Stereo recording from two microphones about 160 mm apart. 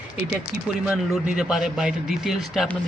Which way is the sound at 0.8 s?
10° right (ahead or behind).